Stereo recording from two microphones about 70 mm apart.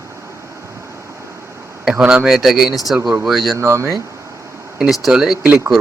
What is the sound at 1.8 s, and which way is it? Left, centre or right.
Speech, centre.